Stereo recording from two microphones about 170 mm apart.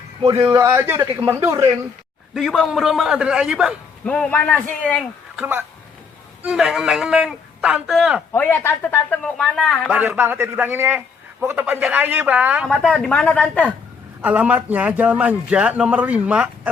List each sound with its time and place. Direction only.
0.5 s a man's voice: 15° right (ahead or behind)
2.3 s a man's voice: centre (ahead or behind)
4.0 s speech: 5° left (ahead or behind)
5.4 s a man's voice: 10° right (ahead or behind)
8.3 s speech: 10° left (ahead or behind)
10.0 s a man's voice: 10° right (ahead or behind)
12.6 s a man's voice: 5° left (ahead or behind)
14.2 s a man's voice: 10° right (ahead or behind)